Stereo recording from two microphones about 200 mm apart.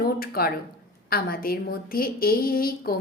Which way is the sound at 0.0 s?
50° left (ahead or behind).